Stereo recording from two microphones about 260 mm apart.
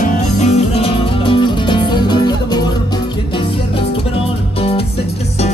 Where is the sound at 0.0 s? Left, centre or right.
Left.